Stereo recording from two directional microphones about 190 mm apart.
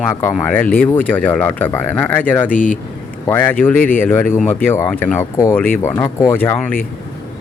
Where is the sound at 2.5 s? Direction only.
45° left (ahead or behind).